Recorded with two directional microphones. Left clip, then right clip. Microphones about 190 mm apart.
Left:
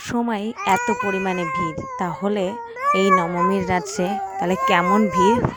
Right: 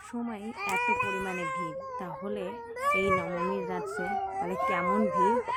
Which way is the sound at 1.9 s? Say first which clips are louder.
Left 12 dB; 45° left (ahead or behind).